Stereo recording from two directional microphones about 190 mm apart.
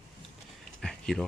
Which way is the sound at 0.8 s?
Centre (ahead or behind).